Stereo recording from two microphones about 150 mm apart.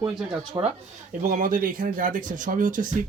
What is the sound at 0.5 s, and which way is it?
Speech, 30° right (ahead or behind).